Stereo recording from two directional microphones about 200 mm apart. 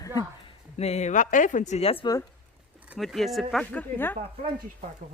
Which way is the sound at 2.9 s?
Centre (ahead or behind).